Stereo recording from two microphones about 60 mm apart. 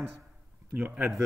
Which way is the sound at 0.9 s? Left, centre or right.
Centre.